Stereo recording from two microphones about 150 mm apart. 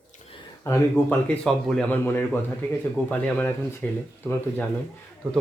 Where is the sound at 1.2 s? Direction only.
5° left (ahead or behind).